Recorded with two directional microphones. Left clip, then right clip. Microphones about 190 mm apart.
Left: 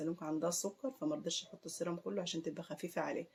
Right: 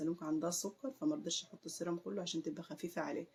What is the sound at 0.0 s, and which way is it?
Speech, 45° left (ahead or behind).